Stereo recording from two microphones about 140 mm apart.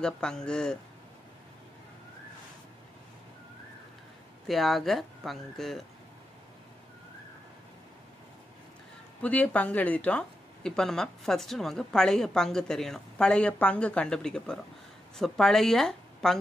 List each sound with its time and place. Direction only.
0.0 s speech: 5° left (ahead or behind)
4.5 s speech: centre (ahead or behind)
9.2 s speech: 10° left (ahead or behind)